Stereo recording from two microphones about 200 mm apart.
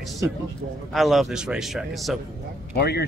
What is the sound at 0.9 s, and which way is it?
Speech, centre (ahead or behind).